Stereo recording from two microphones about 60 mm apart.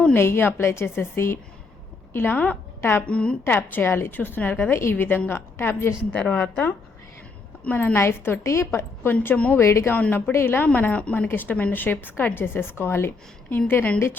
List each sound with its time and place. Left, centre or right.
0.1 s a woman's voice: left
3.1 s a woman's voice: centre
3.4 s a woman's voice: left
4.7 s a woman's voice: left
6.1 s a woman's voice: centre
7.9 s a woman's voice: left
9.3 s a woman's voice: left
9.6 s a woman's voice: left
9.9 s a woman's voice: left
10.3 s a woman's voice: left
11.3 s a woman's voice: left